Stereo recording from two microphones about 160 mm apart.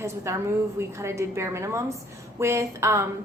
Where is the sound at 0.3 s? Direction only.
15° right (ahead or behind).